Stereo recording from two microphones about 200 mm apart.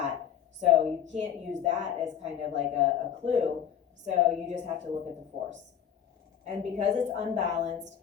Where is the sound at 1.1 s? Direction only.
35° right (ahead or behind).